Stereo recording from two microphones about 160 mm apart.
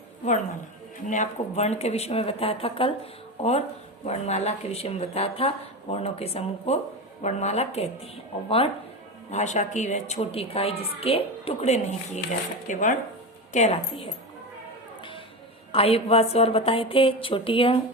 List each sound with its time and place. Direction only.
1.0 s a woman's voice: 50° left (ahead or behind)
9.3 s a woman's voice: 50° left (ahead or behind)
15.7 s speech: 40° left (ahead or behind)